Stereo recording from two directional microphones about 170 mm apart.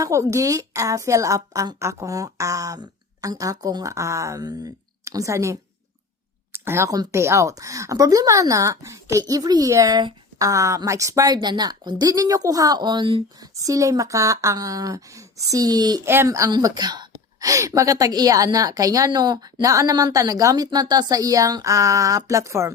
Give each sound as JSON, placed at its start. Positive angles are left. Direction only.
{"t": 0.0, "sound": "speech", "side_deg": -15}